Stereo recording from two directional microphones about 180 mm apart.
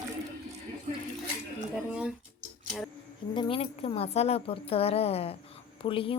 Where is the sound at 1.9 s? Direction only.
5° right (ahead or behind).